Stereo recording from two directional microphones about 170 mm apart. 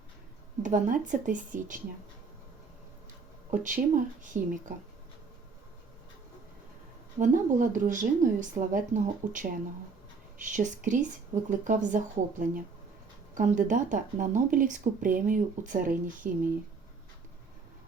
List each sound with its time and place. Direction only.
0.6 s speech: 50° right (ahead or behind)
3.5 s speech: 50° right (ahead or behind)
7.2 s speech: 50° right (ahead or behind)